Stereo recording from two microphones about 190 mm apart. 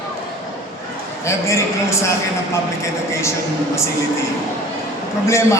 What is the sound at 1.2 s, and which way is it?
Speech, 15° left (ahead or behind).